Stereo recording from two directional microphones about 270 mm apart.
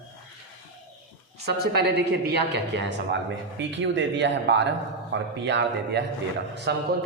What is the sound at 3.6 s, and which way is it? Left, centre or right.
A man's voice, right.